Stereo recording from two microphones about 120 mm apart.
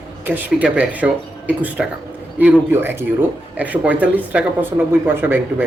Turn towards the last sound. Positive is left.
turn(degrees=-15)  # may be behind; listen again after turning